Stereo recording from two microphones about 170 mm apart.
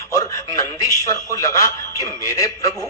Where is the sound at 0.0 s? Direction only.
20° left (ahead or behind).